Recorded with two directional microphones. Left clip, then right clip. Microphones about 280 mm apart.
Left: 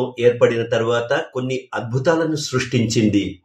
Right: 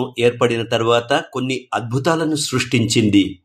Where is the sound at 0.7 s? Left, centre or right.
Right.